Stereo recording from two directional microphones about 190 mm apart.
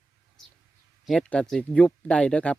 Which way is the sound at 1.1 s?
5° left (ahead or behind).